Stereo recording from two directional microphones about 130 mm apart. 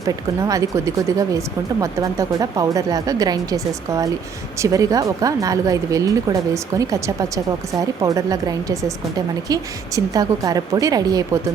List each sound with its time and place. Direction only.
0.0 s speech: 25° right (ahead or behind)